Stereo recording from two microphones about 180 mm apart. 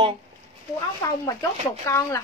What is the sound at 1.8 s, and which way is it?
Speech, 15° left (ahead or behind).